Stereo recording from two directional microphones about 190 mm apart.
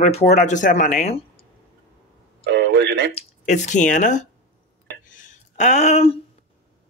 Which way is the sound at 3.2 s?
40° left (ahead or behind).